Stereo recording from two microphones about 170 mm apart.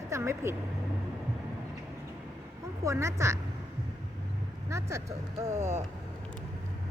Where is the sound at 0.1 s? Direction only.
15° right (ahead or behind).